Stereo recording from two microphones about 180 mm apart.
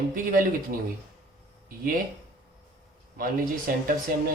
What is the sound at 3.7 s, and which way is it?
Speech, 50° right (ahead or behind).